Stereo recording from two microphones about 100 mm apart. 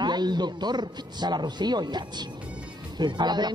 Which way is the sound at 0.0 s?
45° right (ahead or behind).